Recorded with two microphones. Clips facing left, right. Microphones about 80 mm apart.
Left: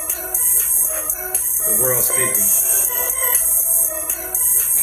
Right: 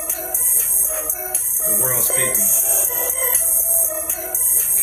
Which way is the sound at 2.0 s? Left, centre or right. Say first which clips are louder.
Even; centre.